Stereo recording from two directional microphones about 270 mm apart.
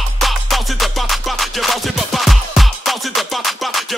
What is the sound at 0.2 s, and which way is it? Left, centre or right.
Music, centre.